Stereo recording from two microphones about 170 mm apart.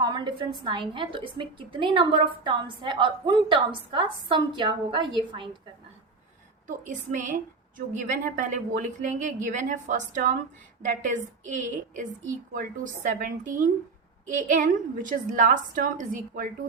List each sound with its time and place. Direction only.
0.0 s a woman's voice: 25° right (ahead or behind)
6.7 s a woman's voice: 50° right (ahead or behind)
13.1 s a woman's voice: 50° right (ahead or behind)